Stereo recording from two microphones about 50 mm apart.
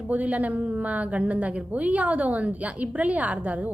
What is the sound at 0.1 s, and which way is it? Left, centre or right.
A woman's voice, right.